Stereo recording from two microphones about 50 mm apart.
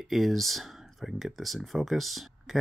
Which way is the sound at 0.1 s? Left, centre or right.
Centre.